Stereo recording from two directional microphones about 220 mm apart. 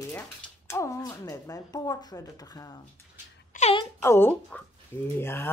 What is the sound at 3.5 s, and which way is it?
Speech, 30° left (ahead or behind).